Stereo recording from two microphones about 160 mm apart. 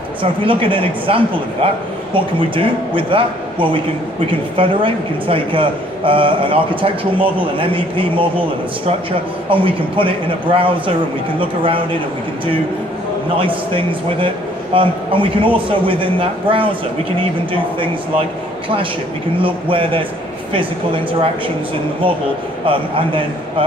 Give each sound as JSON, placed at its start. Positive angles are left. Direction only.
{"t": 0.2, "sound": "a man's voice", "side_deg": -35}
{"t": 13.4, "sound": "a man's voice", "side_deg": -35}
{"t": 19.3, "sound": "a man's voice", "side_deg": -35}
{"t": 22.7, "sound": "a man's voice", "side_deg": -35}